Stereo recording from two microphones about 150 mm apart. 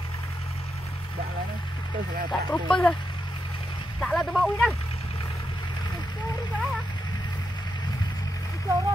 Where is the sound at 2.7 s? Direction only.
5° left (ahead or behind).